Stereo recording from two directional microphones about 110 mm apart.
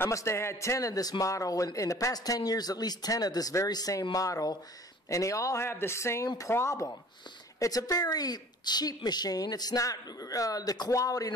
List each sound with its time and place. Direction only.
0.0 s a man's voice: 25° left (ahead or behind)